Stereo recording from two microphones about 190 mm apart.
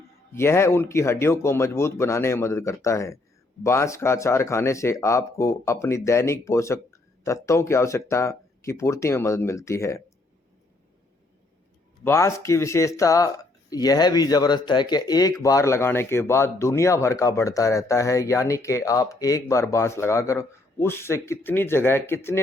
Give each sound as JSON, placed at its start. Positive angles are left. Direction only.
{"t": 0.3, "sound": "speech", "side_deg": 15}
{"t": 12.0, "sound": "speech", "side_deg": 15}